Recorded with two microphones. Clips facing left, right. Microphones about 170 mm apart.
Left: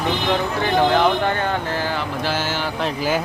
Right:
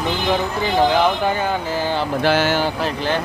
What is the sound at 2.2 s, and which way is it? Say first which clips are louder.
Speech: right 9 dB; 65° right (ahead or behind).